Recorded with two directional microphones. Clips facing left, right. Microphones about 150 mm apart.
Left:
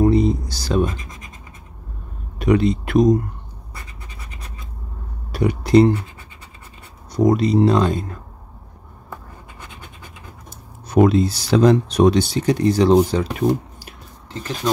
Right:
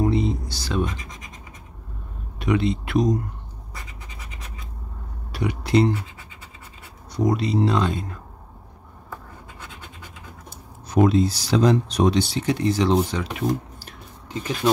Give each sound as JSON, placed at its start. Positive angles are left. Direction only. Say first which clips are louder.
{"t": 0.0, "sound": "a sound", "louder": "left 6 dB", "side_deg": 40}
{"t": 2.3, "sound": "speech", "louder": "left 5 dB", "side_deg": 45}
{"t": 5.3, "sound": "speech", "louder": "left 6 dB", "side_deg": 45}
{"t": 7.1, "sound": "speech", "louder": "left 6 dB", "side_deg": 45}
{"t": 10.9, "sound": "speech", "louder": "left 3 dB", "side_deg": 60}
{"t": 14.3, "sound": "speech", "louder": "right 1 dB", "side_deg": -15}